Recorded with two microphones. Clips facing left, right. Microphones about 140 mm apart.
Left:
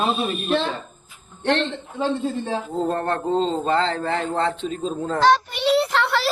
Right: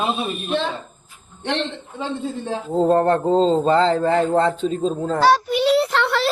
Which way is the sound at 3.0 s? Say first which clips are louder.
Right 5 dB; 35° right (ahead or behind).